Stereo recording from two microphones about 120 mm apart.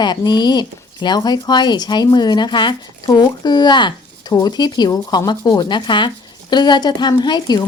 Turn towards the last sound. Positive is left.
turn(degrees=35)  # may be behind; listen again after turning